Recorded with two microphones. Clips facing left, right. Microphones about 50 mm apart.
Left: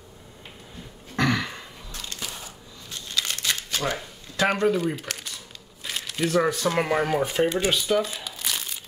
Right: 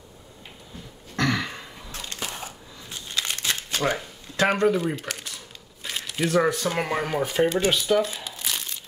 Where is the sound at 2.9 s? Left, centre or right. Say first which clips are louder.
Even; centre.